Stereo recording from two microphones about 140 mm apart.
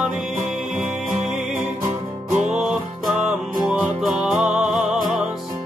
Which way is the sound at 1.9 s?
55° right (ahead or behind).